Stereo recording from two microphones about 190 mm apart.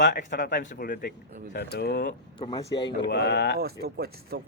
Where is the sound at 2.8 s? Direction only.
65° left (ahead or behind).